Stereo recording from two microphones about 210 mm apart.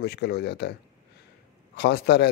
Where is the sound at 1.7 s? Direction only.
50° left (ahead or behind).